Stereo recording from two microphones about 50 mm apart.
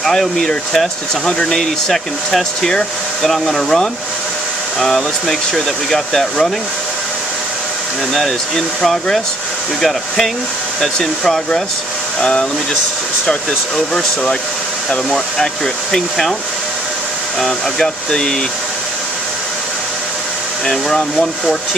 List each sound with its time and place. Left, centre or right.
0.0 s speech: centre
8.1 s speech: centre
17.4 s speech: centre
20.6 s speech: centre